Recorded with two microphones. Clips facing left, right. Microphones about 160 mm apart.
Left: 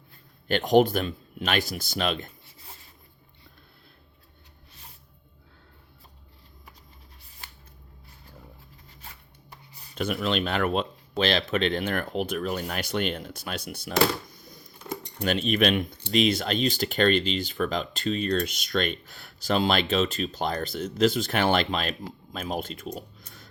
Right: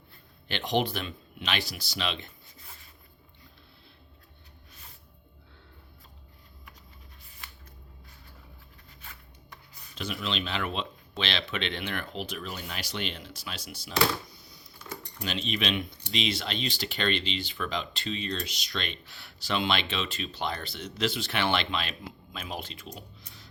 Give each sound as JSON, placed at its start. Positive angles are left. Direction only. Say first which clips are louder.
{"t": 0.4, "sound": "speech", "louder": "left 9 dB", "side_deg": 45}
{"t": 9.0, "sound": "writing", "louder": "left 2 dB", "side_deg": 40}
{"t": 9.9, "sound": "speech", "louder": "left 7 dB", "side_deg": 50}
{"t": 14.3, "sound": "a sound", "louder": "left 5 dB", "side_deg": 45}
{"t": 15.2, "sound": "speech", "louder": "left 8 dB", "side_deg": 50}
{"t": 23.0, "sound": "a sound", "louder": "left 6 dB", "side_deg": 45}